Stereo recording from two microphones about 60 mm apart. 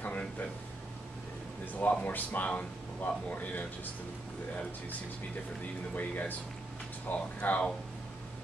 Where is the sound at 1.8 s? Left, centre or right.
Left.